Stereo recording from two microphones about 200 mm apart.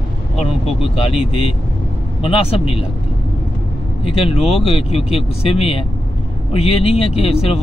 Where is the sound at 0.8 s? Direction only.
30° left (ahead or behind).